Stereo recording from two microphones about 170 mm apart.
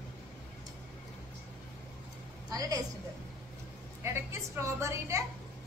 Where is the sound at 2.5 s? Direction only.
20° right (ahead or behind).